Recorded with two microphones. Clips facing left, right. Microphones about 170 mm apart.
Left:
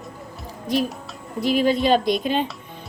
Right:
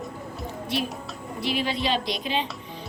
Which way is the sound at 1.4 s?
45° left (ahead or behind).